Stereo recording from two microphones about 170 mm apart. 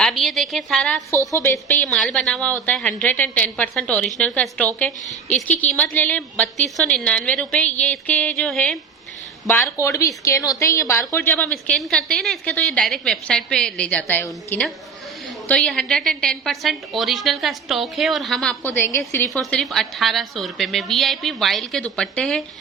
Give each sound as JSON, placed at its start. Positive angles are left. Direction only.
{"t": 0.0, "sound": "a woman's voice", "side_deg": 0}
{"t": 1.1, "sound": "a woman's voice", "side_deg": 15}
{"t": 9.6, "sound": "a woman's voice", "side_deg": 15}
{"t": 19.3, "sound": "a woman's voice", "side_deg": 0}